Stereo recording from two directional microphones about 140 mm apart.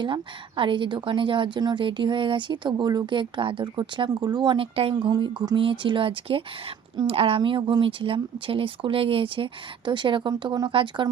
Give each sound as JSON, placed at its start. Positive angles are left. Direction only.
{"t": 0.0, "sound": "a woman's voice", "side_deg": -35}